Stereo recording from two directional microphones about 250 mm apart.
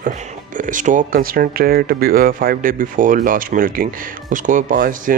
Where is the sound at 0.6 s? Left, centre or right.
Right.